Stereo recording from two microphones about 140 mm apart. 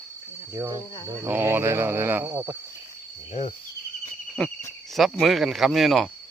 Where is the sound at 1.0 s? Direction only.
15° right (ahead or behind).